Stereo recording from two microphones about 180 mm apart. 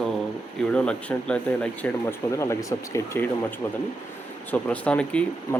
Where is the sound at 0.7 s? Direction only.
5° left (ahead or behind).